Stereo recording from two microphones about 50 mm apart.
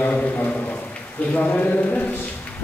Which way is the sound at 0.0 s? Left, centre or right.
Left.